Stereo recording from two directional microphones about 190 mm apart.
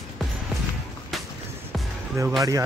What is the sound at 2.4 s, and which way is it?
Speech, 15° right (ahead or behind).